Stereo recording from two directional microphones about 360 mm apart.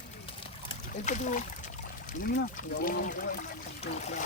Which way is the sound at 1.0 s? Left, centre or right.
Centre.